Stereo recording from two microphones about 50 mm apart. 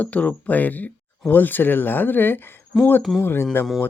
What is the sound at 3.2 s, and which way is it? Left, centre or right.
Speech, left.